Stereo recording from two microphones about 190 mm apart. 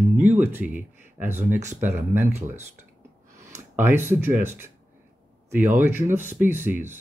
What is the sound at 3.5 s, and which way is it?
Speech, 10° right (ahead or behind).